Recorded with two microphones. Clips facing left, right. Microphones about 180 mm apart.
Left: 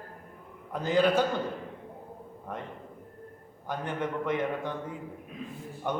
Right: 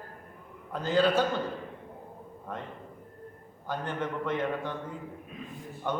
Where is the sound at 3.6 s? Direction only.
15° left (ahead or behind).